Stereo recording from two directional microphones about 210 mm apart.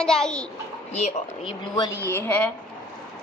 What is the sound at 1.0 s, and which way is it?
Speech, 25° left (ahead or behind).